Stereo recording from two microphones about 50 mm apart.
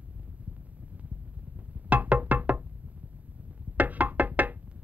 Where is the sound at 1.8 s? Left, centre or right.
Right.